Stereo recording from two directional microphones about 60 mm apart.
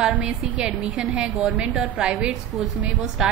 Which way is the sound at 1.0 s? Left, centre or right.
Centre.